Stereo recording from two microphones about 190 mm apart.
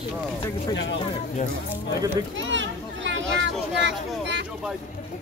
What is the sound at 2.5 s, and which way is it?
Children playing, 75° right (ahead or behind).